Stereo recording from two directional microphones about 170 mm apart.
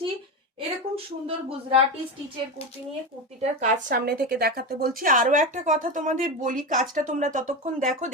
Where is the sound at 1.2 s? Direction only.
35° right (ahead or behind).